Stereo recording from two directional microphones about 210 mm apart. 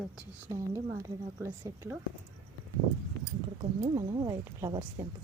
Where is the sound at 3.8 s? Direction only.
15° right (ahead or behind).